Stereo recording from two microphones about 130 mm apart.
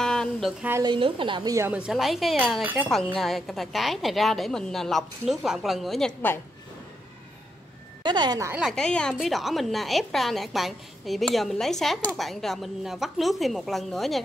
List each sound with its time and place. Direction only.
0.0 s a sound: 5° left (ahead or behind)
0.8 s a woman's voice: 40° right (ahead or behind)
1.7 s a woman's voice: 5° right (ahead or behind)
2.6 s speech: 15° right (ahead or behind)
2.9 s a woman's voice: 5° left (ahead or behind)
8.0 s a woman's voice: 35° right (ahead or behind)
8.7 s a woman's voice: 5° left (ahead or behind)